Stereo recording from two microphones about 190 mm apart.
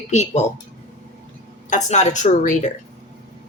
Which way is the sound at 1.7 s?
35° left (ahead or behind).